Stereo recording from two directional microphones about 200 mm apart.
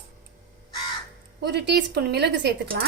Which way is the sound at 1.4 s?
55° right (ahead or behind).